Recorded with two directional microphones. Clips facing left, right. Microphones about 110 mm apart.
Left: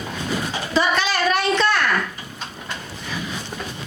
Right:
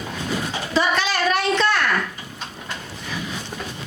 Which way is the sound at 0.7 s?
20° left (ahead or behind).